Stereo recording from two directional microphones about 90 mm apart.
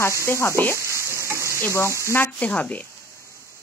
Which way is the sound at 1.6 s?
30° left (ahead or behind).